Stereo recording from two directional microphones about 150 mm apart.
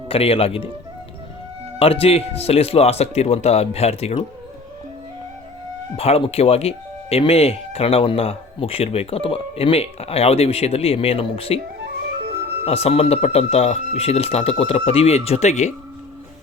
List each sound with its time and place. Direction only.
0.1 s speech: 40° left (ahead or behind)
1.8 s speech: 40° left (ahead or behind)
6.0 s speech: 40° left (ahead or behind)
12.6 s speech: 40° left (ahead or behind)